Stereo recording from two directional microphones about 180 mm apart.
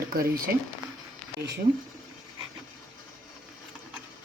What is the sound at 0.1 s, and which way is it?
Speech, 55° right (ahead or behind).